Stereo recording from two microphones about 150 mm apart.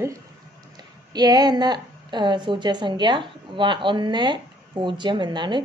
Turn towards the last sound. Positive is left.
turn(degrees=-30)  # may be behind; listen again after turning